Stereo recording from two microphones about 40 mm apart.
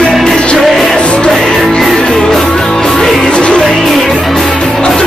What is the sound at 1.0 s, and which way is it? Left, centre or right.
Music, left.